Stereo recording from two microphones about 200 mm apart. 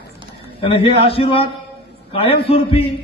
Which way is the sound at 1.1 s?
25° left (ahead or behind).